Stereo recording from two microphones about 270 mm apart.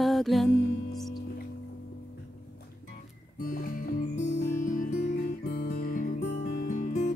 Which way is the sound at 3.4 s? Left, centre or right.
Left.